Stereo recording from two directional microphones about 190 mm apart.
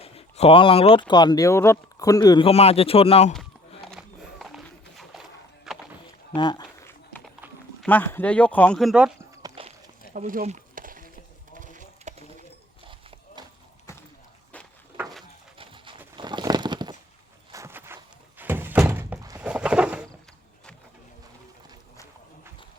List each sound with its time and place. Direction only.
0.0 s speech: 30° left (ahead or behind)
3.9 s horse: centre (ahead or behind)
5.7 s music: centre (ahead or behind)
6.3 s speech: 25° left (ahead or behind)
7.8 s speech: 10° left (ahead or behind)
9.4 s a sound: 30° right (ahead or behind)
10.1 s chopping: 40° right (ahead or behind)
11.6 s a sound: 40° right (ahead or behind)
12.9 s horse: 25° right (ahead or behind)
14.5 s a sound: 10° left (ahead or behind)
15.5 s pigeon: 25° right (ahead or behind)
16.1 s a sound: 25° right (ahead or behind)
17.5 s thunk: 15° right (ahead or behind)
19.4 s bird: 5° right (ahead or behind)